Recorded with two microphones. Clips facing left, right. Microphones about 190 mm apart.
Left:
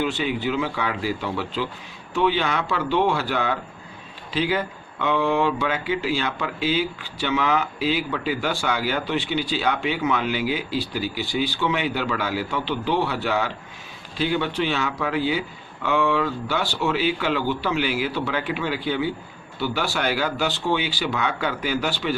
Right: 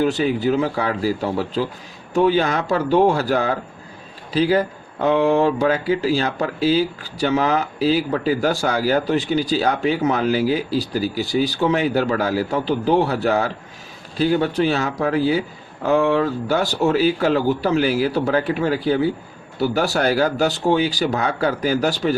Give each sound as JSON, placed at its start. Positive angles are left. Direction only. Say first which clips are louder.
{"t": 0.0, "sound": "speech", "louder": "right 6 dB", "side_deg": -40}